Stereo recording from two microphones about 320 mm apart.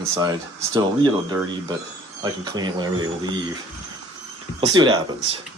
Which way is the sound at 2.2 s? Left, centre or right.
Centre.